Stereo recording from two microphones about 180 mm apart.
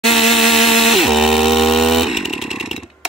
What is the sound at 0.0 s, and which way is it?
Chainsaw, centre (ahead or behind).